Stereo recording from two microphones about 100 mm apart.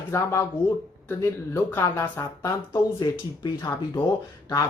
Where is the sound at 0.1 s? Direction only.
30° left (ahead or behind).